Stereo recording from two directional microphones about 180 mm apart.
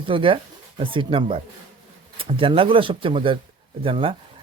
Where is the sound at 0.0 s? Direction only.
30° right (ahead or behind).